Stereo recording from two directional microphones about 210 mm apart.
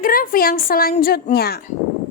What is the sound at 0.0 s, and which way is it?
A child's voice, 40° left (ahead or behind).